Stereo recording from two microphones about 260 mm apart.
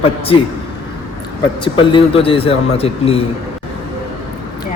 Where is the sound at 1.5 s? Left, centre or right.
Centre.